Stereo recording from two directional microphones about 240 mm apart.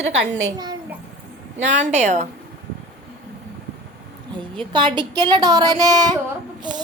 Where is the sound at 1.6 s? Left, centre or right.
Right.